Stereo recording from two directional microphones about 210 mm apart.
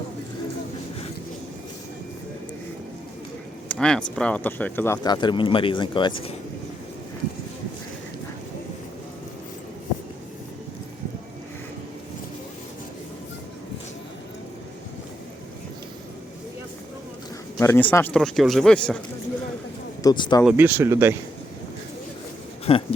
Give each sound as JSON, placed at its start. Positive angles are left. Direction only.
{"t": 3.7, "sound": "a sound", "side_deg": 5}
{"t": 4.1, "sound": "speech", "side_deg": 5}
{"t": 17.6, "sound": "speech", "side_deg": 10}
{"t": 20.0, "sound": "speech", "side_deg": 20}
{"t": 20.4, "sound": "speech", "side_deg": -10}
{"t": 22.7, "sound": "speech", "side_deg": 25}